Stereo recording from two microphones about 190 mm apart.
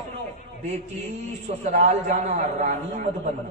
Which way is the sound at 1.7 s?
40° right (ahead or behind).